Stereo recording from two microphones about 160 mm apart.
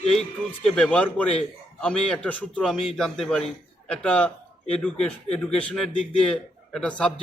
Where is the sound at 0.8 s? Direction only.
5° left (ahead or behind).